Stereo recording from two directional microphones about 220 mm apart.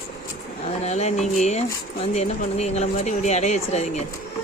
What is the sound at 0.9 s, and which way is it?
Speech, 30° left (ahead or behind).